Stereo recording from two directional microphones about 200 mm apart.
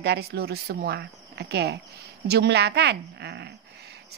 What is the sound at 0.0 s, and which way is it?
A woman's voice, 55° right (ahead or behind).